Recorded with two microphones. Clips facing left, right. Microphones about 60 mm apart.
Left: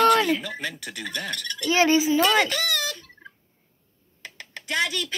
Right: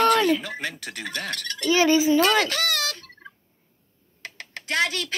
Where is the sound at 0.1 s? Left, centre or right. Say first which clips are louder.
Even; centre.